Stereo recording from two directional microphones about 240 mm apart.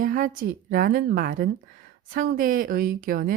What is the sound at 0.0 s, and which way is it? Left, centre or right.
A woman's voice, right.